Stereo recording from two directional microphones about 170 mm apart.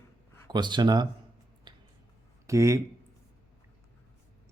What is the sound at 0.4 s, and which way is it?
Speech, 25° right (ahead or behind).